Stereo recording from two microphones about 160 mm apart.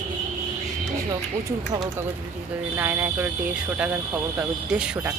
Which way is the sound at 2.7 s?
15° right (ahead or behind).